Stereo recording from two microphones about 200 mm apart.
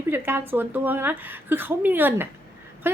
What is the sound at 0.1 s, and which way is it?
Speech, 10° right (ahead or behind).